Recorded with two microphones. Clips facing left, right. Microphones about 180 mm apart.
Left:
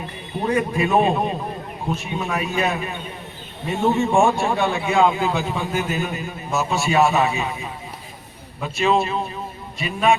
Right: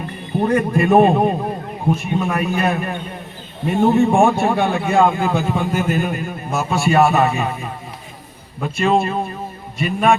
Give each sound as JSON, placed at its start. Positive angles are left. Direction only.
{"t": 0.4, "sound": "a man's voice", "side_deg": -55}